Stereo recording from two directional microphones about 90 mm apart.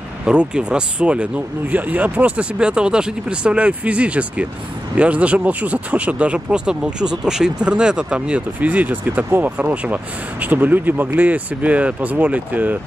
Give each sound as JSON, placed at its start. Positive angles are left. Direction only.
{"t": 0.2, "sound": "speech", "side_deg": -10}